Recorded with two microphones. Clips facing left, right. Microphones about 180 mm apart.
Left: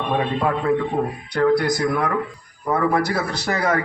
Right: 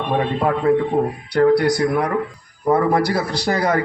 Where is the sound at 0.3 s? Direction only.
30° right (ahead or behind).